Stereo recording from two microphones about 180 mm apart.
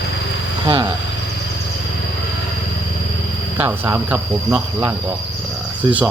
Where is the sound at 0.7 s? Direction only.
25° right (ahead or behind).